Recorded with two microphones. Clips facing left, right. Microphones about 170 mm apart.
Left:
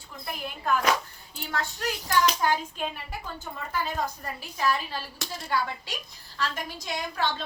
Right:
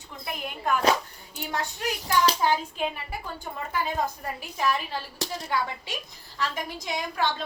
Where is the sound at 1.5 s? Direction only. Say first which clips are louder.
Right 1 dB; 15° right (ahead or behind).